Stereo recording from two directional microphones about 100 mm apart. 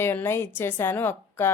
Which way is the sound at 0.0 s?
20° left (ahead or behind).